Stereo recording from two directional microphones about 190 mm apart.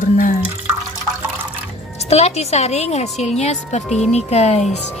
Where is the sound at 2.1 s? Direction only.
35° left (ahead or behind).